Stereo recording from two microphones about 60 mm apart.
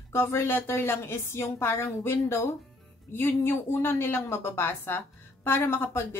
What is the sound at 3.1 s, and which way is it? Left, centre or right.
A woman's voice, left.